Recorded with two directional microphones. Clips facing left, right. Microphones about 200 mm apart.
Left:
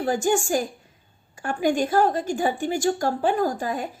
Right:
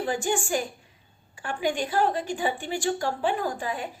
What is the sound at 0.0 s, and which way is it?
A woman's voice, 40° left (ahead or behind).